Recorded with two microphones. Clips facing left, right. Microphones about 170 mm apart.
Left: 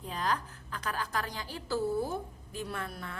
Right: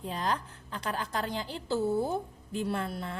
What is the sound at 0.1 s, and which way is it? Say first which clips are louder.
A woman's voice: even; 30° right (ahead or behind).